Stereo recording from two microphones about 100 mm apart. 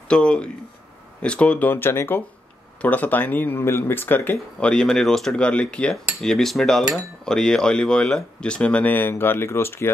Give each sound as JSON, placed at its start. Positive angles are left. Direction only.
{"t": 0.1, "sound": "speech", "side_deg": 10}